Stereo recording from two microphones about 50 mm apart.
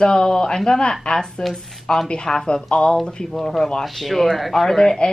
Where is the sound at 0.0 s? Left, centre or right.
Centre.